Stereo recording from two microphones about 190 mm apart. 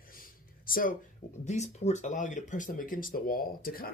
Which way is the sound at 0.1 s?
50° left (ahead or behind).